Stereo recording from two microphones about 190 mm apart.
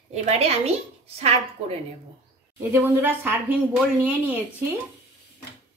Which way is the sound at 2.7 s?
15° right (ahead or behind).